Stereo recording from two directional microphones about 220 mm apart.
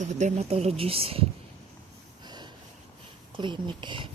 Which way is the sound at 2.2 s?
20° right (ahead or behind).